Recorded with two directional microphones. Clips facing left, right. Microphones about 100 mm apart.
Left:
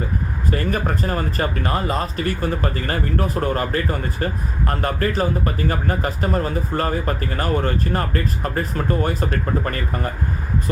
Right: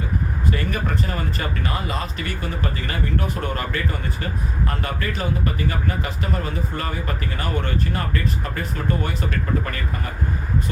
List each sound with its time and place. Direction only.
0.5 s speech: 40° left (ahead or behind)